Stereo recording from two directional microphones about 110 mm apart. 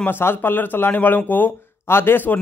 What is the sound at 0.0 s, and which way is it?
A man's voice, 20° left (ahead or behind).